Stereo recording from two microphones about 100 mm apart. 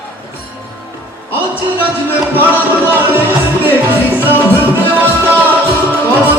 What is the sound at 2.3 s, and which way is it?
Music, 15° right (ahead or behind).